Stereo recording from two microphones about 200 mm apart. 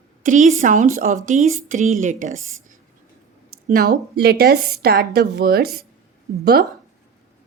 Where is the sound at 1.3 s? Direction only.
35° right (ahead or behind).